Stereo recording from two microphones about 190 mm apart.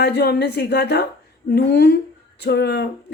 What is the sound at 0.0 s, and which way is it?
Speech, 60° left (ahead or behind).